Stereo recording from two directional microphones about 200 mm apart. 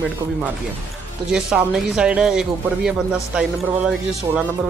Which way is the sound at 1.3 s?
5° right (ahead or behind).